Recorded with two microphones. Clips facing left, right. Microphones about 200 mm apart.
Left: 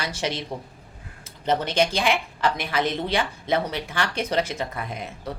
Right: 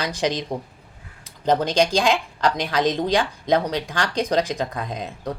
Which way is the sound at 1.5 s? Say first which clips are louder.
Right 3 dB; 15° right (ahead or behind).